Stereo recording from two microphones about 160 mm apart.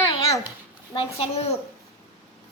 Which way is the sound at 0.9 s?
35° left (ahead or behind).